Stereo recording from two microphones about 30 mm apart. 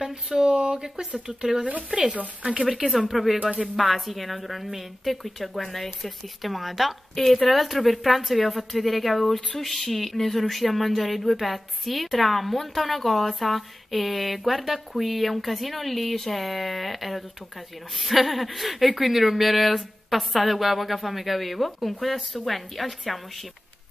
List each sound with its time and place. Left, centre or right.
0.0 s speech: centre
2.5 s speech: right
2.9 s speech: centre